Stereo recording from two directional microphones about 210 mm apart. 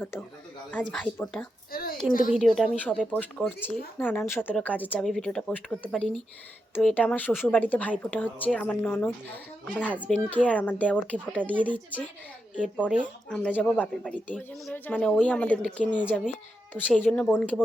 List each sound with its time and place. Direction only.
0.0 s speech: 10° left (ahead or behind)
1.7 s a sound: 45° left (ahead or behind)
2.3 s speech: centre (ahead or behind)
9.9 s a child's voice: 5° right (ahead or behind)
10.2 s speech: 5° left (ahead or behind)